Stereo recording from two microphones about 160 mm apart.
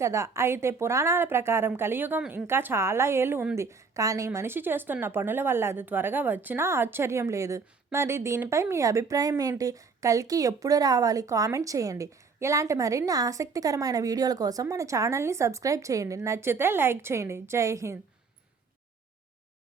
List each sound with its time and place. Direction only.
0.0 s a woman's voice: 20° right (ahead or behind)